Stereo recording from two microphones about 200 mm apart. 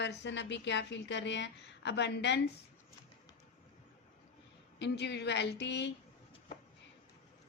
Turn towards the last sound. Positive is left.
turn(degrees=60)  # may be behind; listen again after turning